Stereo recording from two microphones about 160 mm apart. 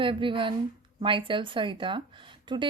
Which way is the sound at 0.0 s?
30° right (ahead or behind).